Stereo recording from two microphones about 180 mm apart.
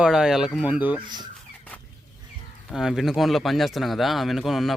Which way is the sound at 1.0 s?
25° right (ahead or behind).